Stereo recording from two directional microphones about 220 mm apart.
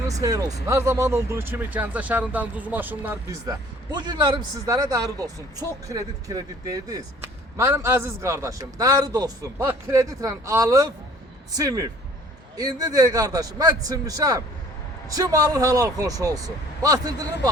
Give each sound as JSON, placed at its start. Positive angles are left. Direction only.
{"t": 0.1, "sound": "speech", "side_deg": -15}